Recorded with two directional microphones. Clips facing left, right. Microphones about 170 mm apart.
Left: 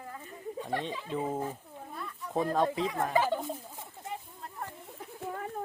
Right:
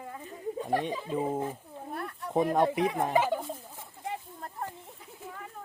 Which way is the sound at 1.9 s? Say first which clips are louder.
Right 6 dB; 65° right (ahead or behind).